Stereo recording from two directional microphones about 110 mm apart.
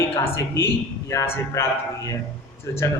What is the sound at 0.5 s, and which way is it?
A man's voice, 25° left (ahead or behind).